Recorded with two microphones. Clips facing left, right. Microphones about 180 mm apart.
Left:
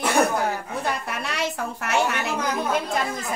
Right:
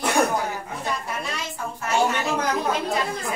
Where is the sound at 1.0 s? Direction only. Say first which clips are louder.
Left 3 dB; 70° left (ahead or behind).